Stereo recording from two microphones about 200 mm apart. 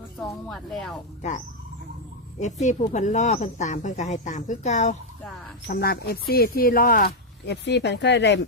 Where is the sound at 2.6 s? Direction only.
35° left (ahead or behind).